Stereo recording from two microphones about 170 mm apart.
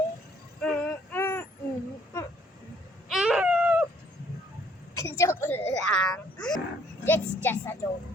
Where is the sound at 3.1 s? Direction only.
5° right (ahead or behind).